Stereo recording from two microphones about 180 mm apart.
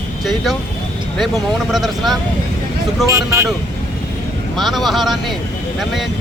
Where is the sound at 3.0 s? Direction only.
15° right (ahead or behind).